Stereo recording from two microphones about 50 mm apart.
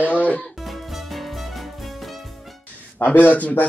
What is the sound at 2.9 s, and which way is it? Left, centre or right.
Speech, left.